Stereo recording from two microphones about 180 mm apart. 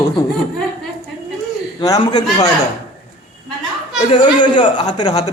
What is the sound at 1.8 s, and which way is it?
Speech, 20° left (ahead or behind).